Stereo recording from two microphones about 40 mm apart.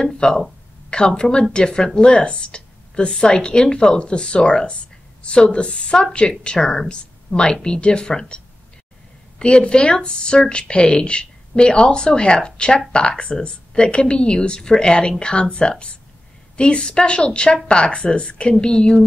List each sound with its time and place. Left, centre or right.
0.2 s a woman's voice: left
9.4 s a woman's voice: left